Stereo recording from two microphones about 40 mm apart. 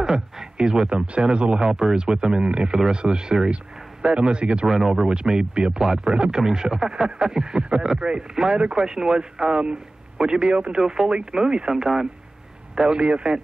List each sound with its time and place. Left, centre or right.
0.0 s speech: centre
4.6 s speech: centre; by 10.7 s right
10.7 s speech: centre
11.8 s speech: centre
12.7 s speech: right